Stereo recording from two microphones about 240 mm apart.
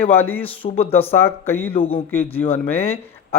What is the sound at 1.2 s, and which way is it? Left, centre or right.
Speech, centre.